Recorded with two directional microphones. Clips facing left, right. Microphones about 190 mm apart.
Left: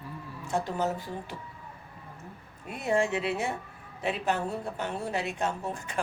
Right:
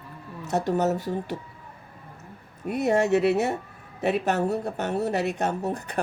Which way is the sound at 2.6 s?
70° right (ahead or behind).